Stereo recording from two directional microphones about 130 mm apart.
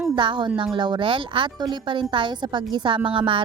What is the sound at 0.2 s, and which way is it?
A woman's voice, 40° right (ahead or behind).